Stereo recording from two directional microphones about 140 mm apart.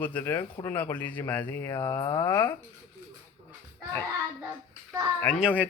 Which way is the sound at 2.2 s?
15° left (ahead or behind).